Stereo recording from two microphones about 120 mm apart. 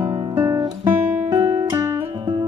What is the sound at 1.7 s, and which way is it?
Music, 25° right (ahead or behind).